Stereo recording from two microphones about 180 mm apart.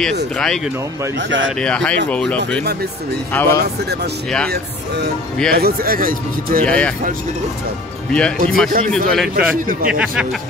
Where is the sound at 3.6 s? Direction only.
65° right (ahead or behind).